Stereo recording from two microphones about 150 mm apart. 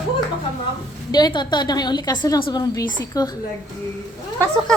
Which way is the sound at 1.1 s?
25° left (ahead or behind).